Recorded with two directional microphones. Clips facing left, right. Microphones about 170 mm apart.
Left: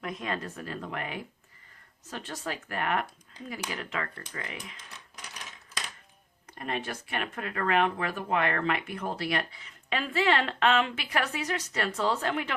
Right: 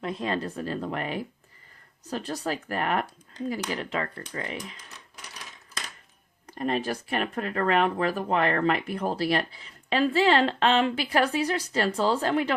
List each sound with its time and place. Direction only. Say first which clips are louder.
0.0 s speech: right 5 dB; 30° right (ahead or behind)
6.6 s speech: right 7 dB; 35° right (ahead or behind)